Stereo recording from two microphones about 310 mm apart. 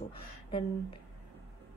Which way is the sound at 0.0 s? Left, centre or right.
Centre.